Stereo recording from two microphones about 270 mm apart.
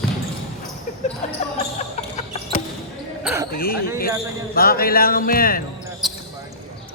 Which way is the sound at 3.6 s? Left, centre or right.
Left.